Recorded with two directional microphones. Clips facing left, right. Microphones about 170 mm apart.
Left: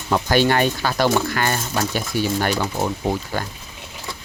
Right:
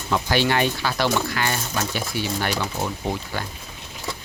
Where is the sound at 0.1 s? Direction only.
45° left (ahead or behind).